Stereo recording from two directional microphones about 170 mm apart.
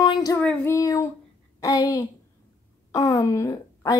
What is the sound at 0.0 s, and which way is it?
Child singing, 25° left (ahead or behind).